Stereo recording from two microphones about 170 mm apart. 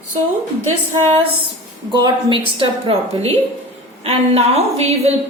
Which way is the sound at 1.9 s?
25° right (ahead or behind).